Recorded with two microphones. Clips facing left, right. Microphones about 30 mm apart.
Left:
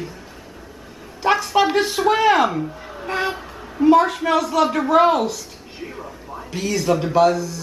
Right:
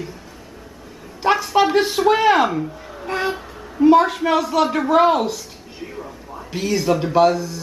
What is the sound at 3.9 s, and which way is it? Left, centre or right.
A woman's voice, centre.